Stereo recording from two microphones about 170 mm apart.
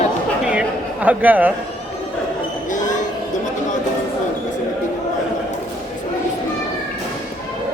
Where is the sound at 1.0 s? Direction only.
10° right (ahead or behind).